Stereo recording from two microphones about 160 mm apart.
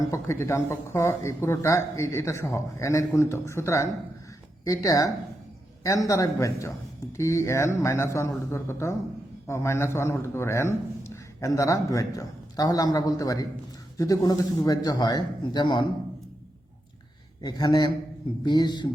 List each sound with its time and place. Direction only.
0.0 s a man's voice: 20° left (ahead or behind)
17.4 s a man's voice: 25° left (ahead or behind)